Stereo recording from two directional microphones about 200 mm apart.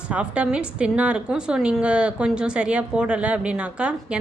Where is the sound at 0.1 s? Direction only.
5° right (ahead or behind).